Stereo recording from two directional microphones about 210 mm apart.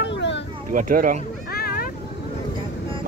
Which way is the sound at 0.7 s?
40° right (ahead or behind).